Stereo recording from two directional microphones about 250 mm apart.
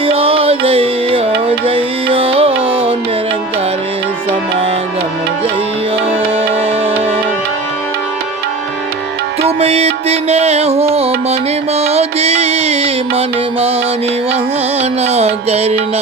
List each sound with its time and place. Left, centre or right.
0.0 s music: right
9.6 s music: right
14.8 s music: right